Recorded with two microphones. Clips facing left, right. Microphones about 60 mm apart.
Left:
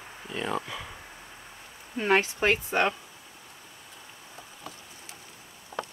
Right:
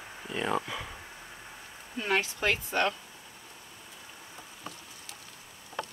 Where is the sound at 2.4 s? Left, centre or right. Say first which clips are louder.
Left 4 dB; left.